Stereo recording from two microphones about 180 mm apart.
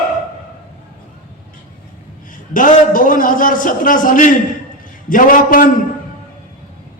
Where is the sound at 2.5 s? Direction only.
50° left (ahead or behind).